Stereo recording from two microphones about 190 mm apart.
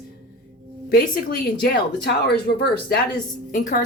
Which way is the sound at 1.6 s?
55° left (ahead or behind).